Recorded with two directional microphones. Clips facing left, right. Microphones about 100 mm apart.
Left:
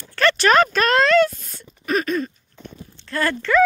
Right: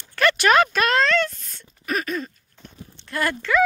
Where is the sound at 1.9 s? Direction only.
5° right (ahead or behind).